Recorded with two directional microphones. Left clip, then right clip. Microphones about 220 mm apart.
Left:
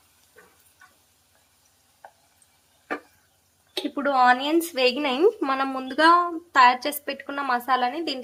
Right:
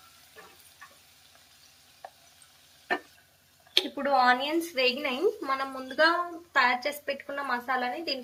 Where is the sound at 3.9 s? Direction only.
50° left (ahead or behind).